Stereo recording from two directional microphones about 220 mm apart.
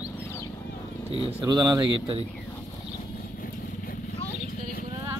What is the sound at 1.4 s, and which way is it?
Speech, 20° right (ahead or behind).